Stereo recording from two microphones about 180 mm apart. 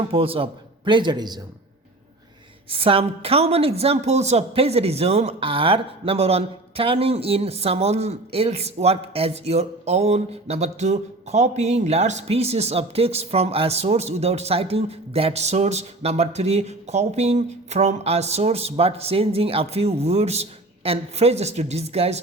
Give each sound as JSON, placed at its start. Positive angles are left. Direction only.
{"t": 0.0, "sound": "a man's voice", "side_deg": -30}
{"t": 2.7, "sound": "a woman's voice", "side_deg": -30}